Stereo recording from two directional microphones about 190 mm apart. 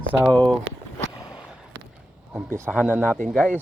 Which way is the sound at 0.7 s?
85° right.